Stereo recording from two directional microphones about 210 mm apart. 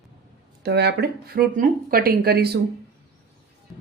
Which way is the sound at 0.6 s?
50° right (ahead or behind).